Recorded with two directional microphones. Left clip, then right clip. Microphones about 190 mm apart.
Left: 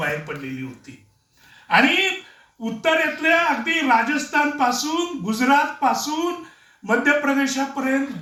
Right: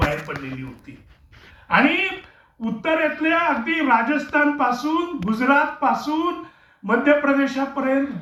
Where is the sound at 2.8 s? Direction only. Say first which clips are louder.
Left 1 dB; 50° left (ahead or behind).